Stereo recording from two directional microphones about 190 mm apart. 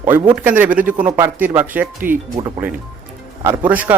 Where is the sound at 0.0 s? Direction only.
10° right (ahead or behind).